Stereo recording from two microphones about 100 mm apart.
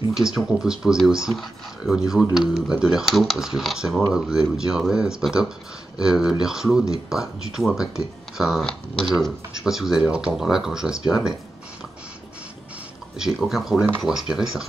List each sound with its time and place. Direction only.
0.1 s speech: 5° right (ahead or behind)
13.2 s speech: centre (ahead or behind)